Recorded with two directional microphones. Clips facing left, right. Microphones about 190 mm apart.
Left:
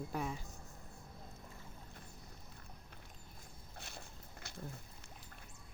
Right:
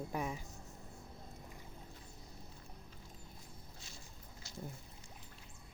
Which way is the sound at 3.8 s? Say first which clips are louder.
Left 4 dB; 60° left (ahead or behind).